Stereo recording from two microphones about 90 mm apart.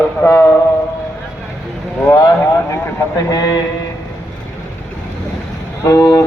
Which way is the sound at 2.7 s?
40° left (ahead or behind).